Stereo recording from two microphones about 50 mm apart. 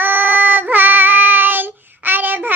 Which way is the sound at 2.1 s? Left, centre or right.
Right.